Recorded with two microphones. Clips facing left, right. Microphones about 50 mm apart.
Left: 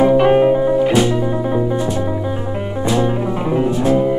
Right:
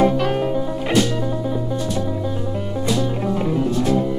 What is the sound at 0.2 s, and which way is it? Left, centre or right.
Music, left.